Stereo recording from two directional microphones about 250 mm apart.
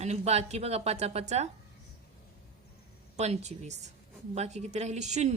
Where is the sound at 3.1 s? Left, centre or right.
Right.